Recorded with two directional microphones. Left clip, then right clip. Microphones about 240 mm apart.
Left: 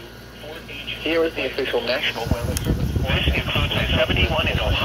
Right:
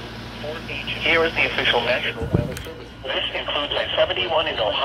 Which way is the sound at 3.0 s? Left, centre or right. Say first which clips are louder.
Left 1 dB; centre.